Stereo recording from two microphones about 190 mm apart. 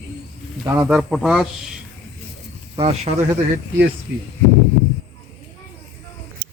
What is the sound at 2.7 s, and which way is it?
Speech, 30° right (ahead or behind).